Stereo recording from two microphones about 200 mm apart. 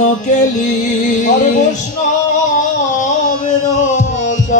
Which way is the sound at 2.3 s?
40° left (ahead or behind).